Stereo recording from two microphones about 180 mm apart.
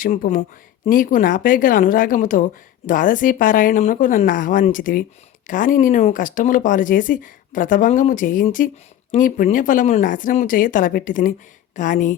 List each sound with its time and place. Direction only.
0.0 s a woman's voice: 45° left (ahead or behind)